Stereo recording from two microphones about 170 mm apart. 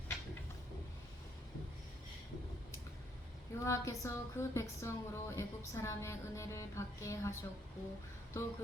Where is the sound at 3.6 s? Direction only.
15° left (ahead or behind).